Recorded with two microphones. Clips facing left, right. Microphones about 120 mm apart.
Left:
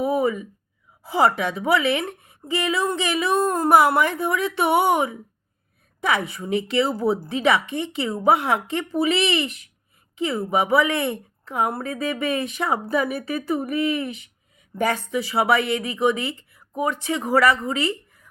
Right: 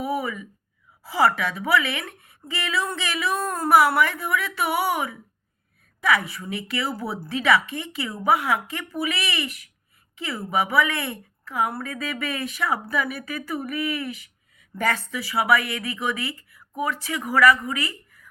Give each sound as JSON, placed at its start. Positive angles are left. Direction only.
{"t": 0.0, "sound": "a woman's voice", "side_deg": 25}